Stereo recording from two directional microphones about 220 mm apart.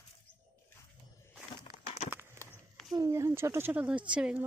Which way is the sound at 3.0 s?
15° right (ahead or behind).